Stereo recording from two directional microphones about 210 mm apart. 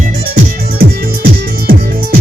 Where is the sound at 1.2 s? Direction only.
50° right (ahead or behind).